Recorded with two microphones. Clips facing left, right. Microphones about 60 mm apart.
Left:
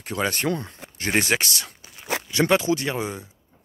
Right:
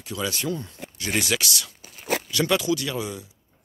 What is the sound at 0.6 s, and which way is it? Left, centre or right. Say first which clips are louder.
Speech: left 3 dB; left.